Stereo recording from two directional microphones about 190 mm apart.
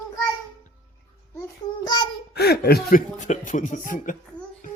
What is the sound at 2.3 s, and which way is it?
Speech, 60° left (ahead or behind).